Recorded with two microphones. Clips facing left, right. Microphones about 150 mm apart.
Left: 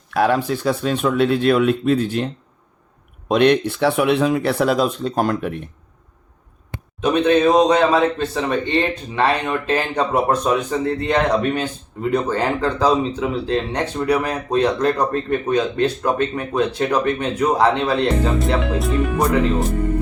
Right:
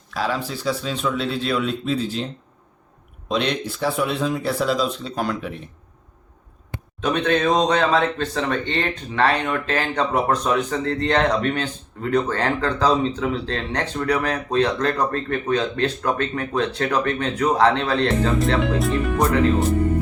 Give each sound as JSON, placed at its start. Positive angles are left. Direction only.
{"t": 0.1, "sound": "speech", "side_deg": 60}
{"t": 7.0, "sound": "speech", "side_deg": 10}
{"t": 18.6, "sound": "speech", "side_deg": 0}